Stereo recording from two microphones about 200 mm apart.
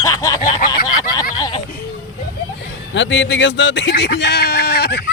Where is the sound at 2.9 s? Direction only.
65° left (ahead or behind).